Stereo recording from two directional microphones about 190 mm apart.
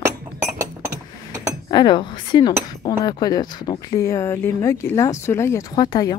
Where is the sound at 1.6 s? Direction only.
25° left (ahead or behind).